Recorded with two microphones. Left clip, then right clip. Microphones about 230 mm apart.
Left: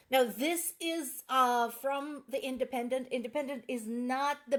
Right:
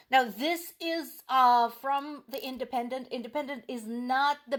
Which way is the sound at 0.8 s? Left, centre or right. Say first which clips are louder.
Right 3 dB; right.